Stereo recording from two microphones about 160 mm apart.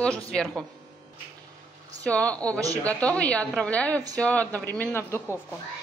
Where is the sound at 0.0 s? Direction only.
5° left (ahead or behind).